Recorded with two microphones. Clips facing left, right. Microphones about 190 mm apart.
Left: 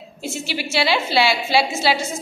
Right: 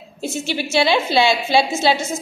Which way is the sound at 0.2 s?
20° right (ahead or behind).